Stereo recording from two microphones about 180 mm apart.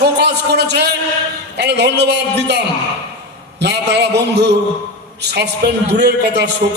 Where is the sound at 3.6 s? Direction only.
70° right (ahead or behind).